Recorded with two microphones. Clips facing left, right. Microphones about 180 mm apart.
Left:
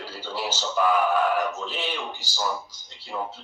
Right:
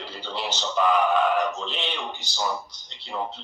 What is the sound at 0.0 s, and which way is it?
Speech, 5° left (ahead or behind).